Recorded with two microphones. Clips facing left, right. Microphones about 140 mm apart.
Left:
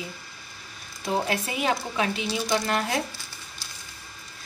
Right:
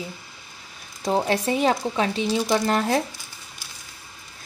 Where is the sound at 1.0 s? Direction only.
35° right (ahead or behind).